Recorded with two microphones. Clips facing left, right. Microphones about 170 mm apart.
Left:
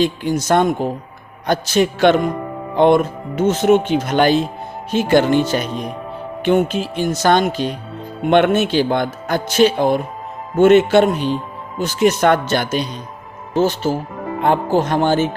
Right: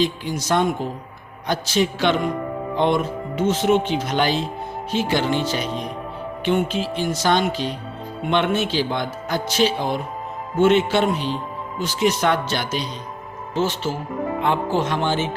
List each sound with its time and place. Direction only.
0.0 s a man's voice: 50° left (ahead or behind)
13.6 s a man's voice: 40° left (ahead or behind)